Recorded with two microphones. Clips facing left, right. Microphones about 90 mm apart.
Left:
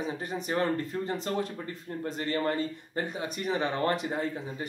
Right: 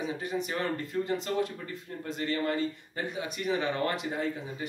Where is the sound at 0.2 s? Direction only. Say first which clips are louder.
Left 2 dB; 40° left (ahead or behind).